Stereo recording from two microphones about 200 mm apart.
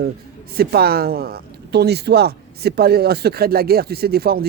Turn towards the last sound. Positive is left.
turn(degrees=-50)  # may be behind; listen again after turning